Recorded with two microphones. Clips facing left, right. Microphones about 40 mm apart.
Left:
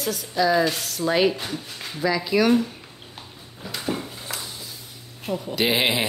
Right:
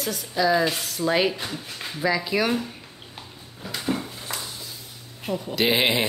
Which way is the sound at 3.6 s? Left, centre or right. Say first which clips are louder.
Right 1 dB; centre.